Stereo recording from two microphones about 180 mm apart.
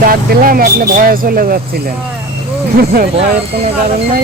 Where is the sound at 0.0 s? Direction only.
50° right (ahead or behind).